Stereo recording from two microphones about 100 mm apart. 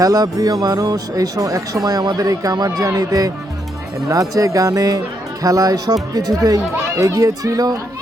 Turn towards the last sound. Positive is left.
turn(degrees=-40)  # may be behind; listen again after turning